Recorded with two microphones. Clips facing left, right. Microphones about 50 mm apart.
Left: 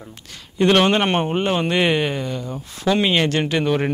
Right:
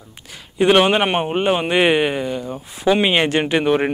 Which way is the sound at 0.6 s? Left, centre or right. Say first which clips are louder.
Right 2 dB; centre.